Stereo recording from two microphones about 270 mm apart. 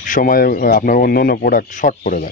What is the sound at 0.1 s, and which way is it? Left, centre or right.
Speech, left.